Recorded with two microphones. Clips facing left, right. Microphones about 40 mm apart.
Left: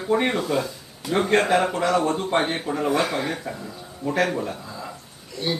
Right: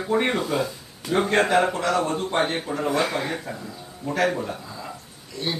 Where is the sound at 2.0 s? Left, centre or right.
Centre.